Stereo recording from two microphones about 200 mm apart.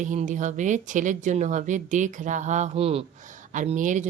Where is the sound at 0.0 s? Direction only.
40° right (ahead or behind).